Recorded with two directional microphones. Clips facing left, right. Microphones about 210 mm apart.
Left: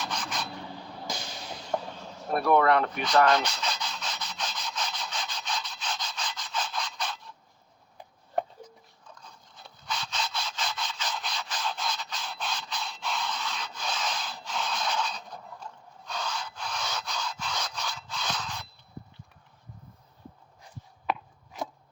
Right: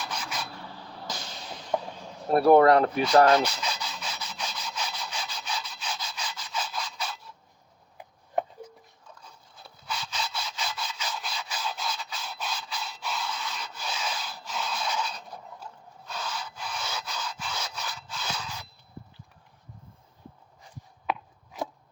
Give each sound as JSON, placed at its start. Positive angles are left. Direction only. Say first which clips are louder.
{"t": 0.0, "sound": "rub", "louder": "left 1 dB", "side_deg": -10}
{"t": 2.3, "sound": "speech", "louder": "right 5 dB", "side_deg": -35}
{"t": 3.4, "sound": "sawing", "louder": "right 2 dB", "side_deg": -10}
{"t": 7.9, "sound": "a sound", "louder": "right 1 dB", "side_deg": -5}
{"t": 9.6, "sound": "wood", "louder": "even", "side_deg": -5}
{"t": 15.6, "sound": "rub", "louder": "even", "side_deg": -5}
{"t": 21.1, "sound": "a sound", "louder": "even", "side_deg": -5}